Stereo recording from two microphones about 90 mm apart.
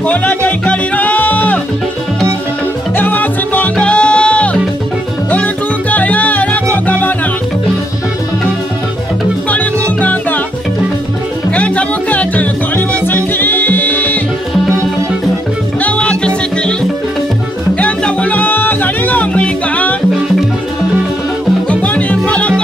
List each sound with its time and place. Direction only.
0.0 s music: 15° left (ahead or behind)
3.0 s music: 20° left (ahead or behind)
9.5 s music: 20° left (ahead or behind)
11.5 s music: 15° left (ahead or behind)
15.8 s music: 15° left (ahead or behind)
17.7 s music: 15° left (ahead or behind)
21.6 s music: 15° left (ahead or behind)